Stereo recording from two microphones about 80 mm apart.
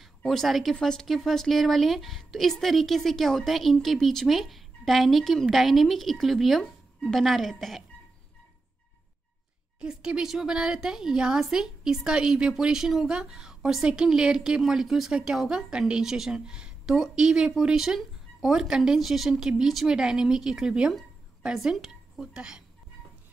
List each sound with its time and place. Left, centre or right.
0.0 s a woman's voice: centre
9.8 s a woman's voice: centre
21.7 s a sound: centre
22.2 s a woman's voice: centre